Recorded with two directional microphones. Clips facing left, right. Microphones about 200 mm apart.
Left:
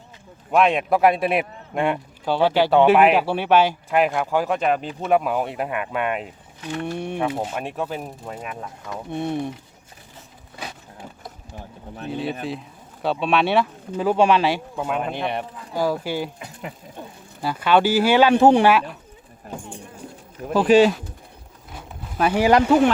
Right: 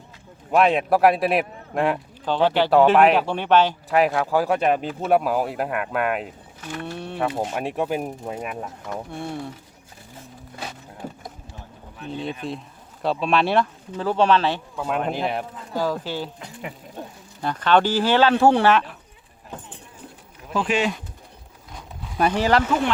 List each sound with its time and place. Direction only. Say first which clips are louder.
0.5 s a man's voice: even; centre (ahead or behind)
2.2 s speech: left 1 dB; 10° left (ahead or behind)
3.8 s a man's voice: even; centre (ahead or behind)
6.7 s speech: left 5 dB; 15° left (ahead or behind)
7.5 s speech: right 3 dB; 10° right (ahead or behind)
9.0 s speech: left 6 dB; 20° left (ahead or behind)
12.1 s a man's voice: left 2 dB; 5° left (ahead or behind)
14.9 s a man's voice: right 2 dB; centre (ahead or behind)
15.7 s speech: left 2 dB; 10° left (ahead or behind)
19.5 s music: left 3 dB; 10° left (ahead or behind)
20.5 s speech: left 8 dB; 35° left (ahead or behind)
21.7 s a sound: left 1 dB; 5° left (ahead or behind)